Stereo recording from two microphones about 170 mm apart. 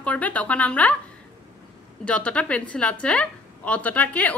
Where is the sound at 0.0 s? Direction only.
10° left (ahead or behind).